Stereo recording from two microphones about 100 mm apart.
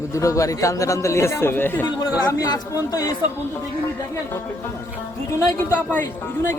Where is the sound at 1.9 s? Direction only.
35° left (ahead or behind).